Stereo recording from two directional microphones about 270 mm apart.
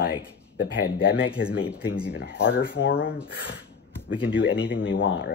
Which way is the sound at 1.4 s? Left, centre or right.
Left.